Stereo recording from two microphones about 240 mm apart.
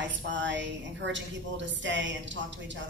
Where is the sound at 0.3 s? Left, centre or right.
Right.